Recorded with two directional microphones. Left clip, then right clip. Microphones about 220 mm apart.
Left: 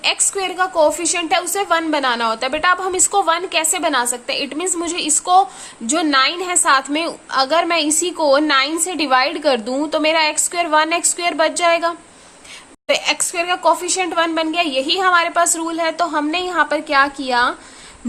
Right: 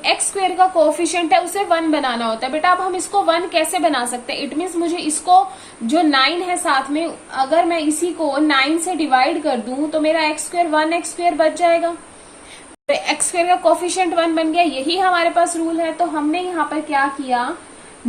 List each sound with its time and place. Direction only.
0.0 s a woman's voice: 35° left (ahead or behind)